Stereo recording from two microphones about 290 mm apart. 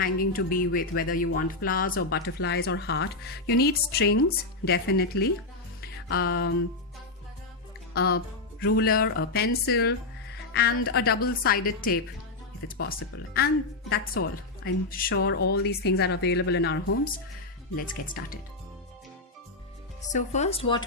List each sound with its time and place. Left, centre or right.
0.0 s speech: left
5.8 s music: left
7.9 s speech: left
17.7 s speech: left
20.0 s speech: left